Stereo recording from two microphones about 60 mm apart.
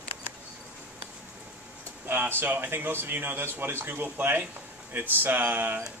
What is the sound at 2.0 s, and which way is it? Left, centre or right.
Speech, right.